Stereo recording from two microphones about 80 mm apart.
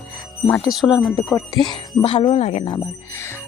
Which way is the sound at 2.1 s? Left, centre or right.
Left.